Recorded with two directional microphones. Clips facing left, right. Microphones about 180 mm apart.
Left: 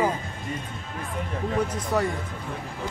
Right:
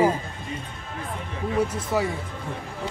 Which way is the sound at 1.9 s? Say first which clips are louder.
Even; 5° right (ahead or behind).